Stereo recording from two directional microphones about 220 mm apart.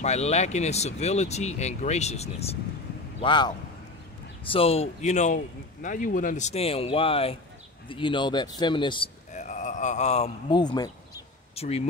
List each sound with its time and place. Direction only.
0.0 s a man's voice: 30° left (ahead or behind)